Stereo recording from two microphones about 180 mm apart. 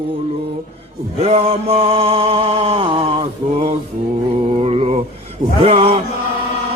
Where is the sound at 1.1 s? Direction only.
35° right (ahead or behind).